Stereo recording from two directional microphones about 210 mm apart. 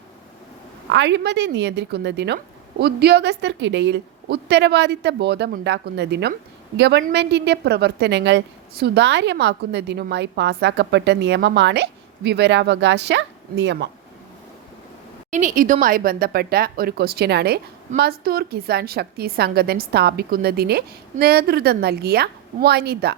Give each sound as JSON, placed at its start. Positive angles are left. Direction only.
{"t": 0.9, "sound": "a woman's voice", "side_deg": -55}
{"t": 15.3, "sound": "speech", "side_deg": -40}